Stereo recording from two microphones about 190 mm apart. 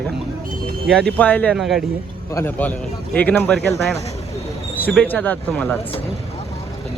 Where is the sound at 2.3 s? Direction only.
10° left (ahead or behind).